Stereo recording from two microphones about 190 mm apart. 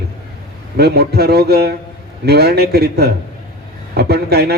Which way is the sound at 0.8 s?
60° right (ahead or behind).